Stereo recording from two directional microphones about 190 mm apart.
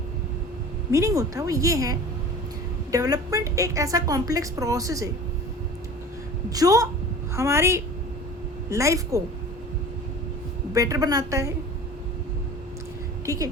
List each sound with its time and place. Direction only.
0.9 s a woman's voice: 15° right (ahead or behind)
6.5 s a woman's voice: 20° right (ahead or behind)
10.8 s a woman's voice: 20° right (ahead or behind)
13.2 s a woman's voice: 15° right (ahead or behind)